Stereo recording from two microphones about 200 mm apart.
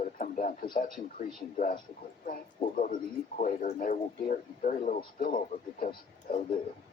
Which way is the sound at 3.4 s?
40° left (ahead or behind).